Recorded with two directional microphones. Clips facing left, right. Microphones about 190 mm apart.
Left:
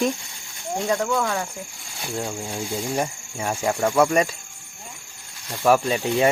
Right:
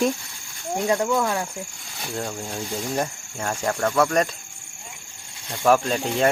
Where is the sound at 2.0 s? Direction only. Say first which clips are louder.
Left 1 dB; 5° left (ahead or behind).